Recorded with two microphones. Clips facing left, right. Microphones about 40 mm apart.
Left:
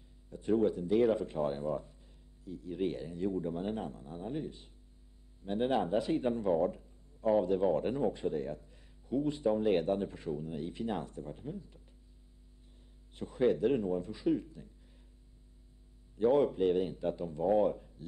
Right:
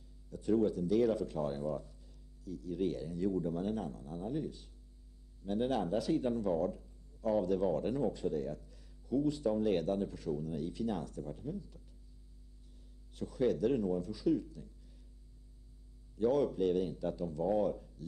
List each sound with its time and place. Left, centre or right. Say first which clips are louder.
0.3 s speech: left 1 dB; left
13.1 s speech: left 3 dB; left
16.2 s speech: left 3 dB; left